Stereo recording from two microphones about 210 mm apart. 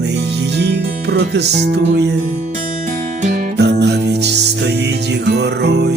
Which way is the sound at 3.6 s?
55° right (ahead or behind).